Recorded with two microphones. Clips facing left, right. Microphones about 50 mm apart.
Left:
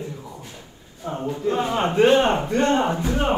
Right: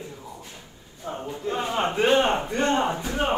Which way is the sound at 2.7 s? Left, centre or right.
Left.